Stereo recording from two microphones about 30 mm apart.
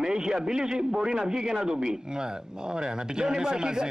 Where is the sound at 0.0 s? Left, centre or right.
Right.